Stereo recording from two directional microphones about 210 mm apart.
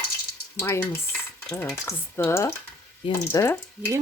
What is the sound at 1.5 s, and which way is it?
Speech, 10° left (ahead or behind).